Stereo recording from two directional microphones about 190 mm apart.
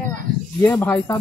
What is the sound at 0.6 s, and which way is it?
Speech, 10° left (ahead or behind).